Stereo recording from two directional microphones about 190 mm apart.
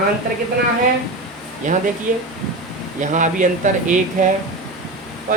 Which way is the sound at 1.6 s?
40° right (ahead or behind).